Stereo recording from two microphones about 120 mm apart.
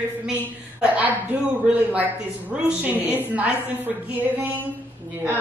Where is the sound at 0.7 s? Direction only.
10° right (ahead or behind).